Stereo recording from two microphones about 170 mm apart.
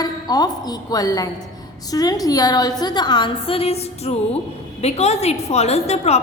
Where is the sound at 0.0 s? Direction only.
25° left (ahead or behind).